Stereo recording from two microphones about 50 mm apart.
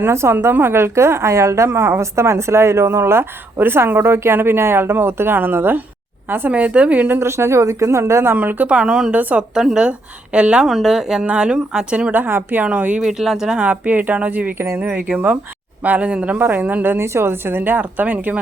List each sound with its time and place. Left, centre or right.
0.0 s a woman's voice: right
0.5 s a woman's voice: right
6.5 s speech: right
7.2 s speech: right
8.4 s speech: right
8.7 s a woman's voice: right
10.6 s a woman's voice: centre
11.3 s speech: right
12.1 s speech: right
12.6 s speech: right
13.0 s a woman's voice: centre
13.6 s speech: right
16.4 s speech: right
17.0 s speech: right